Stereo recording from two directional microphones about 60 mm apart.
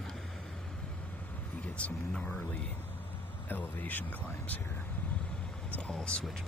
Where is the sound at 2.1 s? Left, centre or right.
Centre.